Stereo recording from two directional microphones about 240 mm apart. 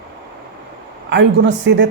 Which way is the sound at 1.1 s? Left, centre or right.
Right.